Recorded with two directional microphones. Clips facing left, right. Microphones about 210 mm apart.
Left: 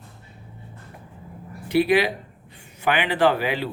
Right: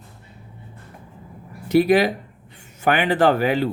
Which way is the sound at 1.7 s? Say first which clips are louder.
Right 3 dB; 45° right (ahead or behind).